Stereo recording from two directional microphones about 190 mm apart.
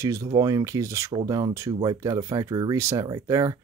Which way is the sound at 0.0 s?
15° right (ahead or behind).